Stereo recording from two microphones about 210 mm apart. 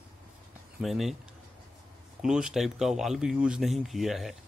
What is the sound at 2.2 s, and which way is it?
Speech, 5° right (ahead or behind).